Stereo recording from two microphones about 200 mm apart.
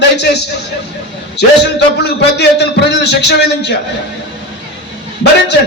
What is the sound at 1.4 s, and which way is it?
A man's voice, 55° left (ahead or behind).